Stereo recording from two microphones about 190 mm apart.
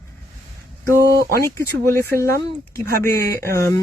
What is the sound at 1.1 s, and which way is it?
Speech, 55° right (ahead or behind).